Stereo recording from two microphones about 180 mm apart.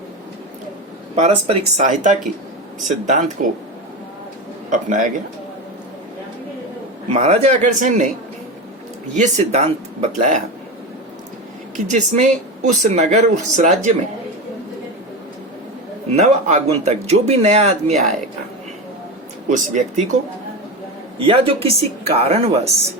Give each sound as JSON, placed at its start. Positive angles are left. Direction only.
{"t": 1.1, "sound": "speech", "side_deg": -35}
{"t": 4.7, "sound": "speech", "side_deg": -45}
{"t": 7.1, "sound": "speech", "side_deg": -35}
{"t": 9.1, "sound": "speech", "side_deg": -40}
{"t": 11.9, "sound": "speech", "side_deg": -40}
{"t": 16.1, "sound": "speech", "side_deg": -40}
{"t": 19.5, "sound": "speech", "side_deg": -40}
{"t": 21.2, "sound": "speech", "side_deg": -30}